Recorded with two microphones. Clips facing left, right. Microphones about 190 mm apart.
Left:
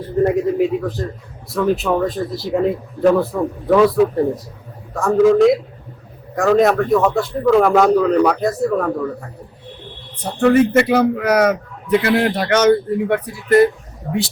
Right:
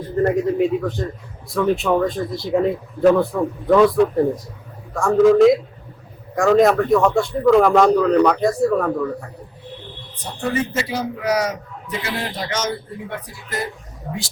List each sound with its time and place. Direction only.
0.2 s a man's voice: centre (ahead or behind)
10.4 s a man's voice: 60° left (ahead or behind)